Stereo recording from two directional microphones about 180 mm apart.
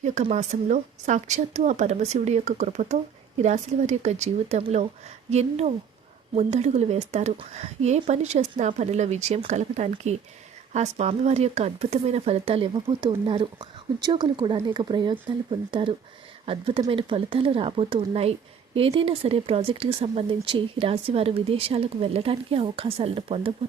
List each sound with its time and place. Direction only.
0.0 s speech: 40° right (ahead or behind)